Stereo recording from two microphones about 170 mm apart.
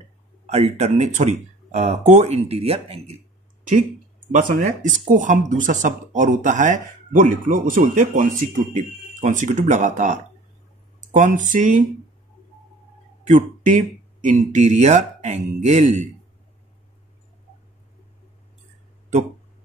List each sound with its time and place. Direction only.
0.5 s speech: 40° right (ahead or behind)
4.3 s speech: 50° right (ahead or behind)
13.2 s speech: 45° right (ahead or behind)